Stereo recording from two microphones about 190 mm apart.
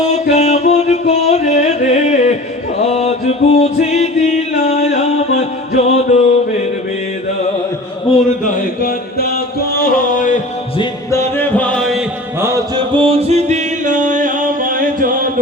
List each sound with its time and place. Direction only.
0.0 s music: 35° left (ahead or behind)
8.4 s music: 50° left (ahead or behind)
10.8 s music: 15° left (ahead or behind)
12.4 s music: 15° right (ahead or behind); by 15.3 s 45° right (ahead or behind)